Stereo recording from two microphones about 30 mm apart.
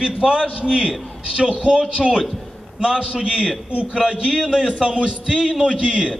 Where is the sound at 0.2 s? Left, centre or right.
Right.